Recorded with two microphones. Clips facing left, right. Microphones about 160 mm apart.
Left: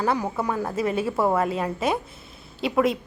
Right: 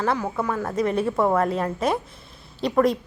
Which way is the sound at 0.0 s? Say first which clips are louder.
Even; 10° left (ahead or behind).